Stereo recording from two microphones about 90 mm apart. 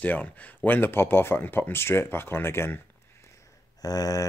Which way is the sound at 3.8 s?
45° left (ahead or behind).